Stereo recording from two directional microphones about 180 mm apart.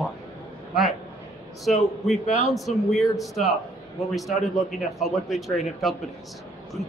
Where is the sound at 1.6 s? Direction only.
Centre (ahead or behind).